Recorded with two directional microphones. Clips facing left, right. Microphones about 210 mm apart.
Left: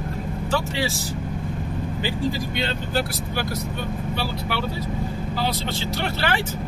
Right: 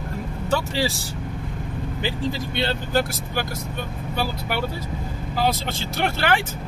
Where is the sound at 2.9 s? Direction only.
45° right (ahead or behind).